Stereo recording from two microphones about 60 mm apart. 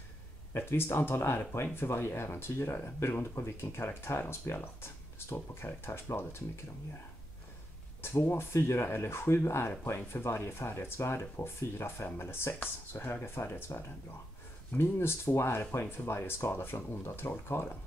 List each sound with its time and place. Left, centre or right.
0.5 s speech: left
8.0 s speech: left